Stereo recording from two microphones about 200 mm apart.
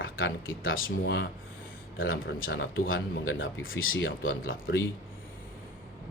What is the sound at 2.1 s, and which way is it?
Speech, 90° left.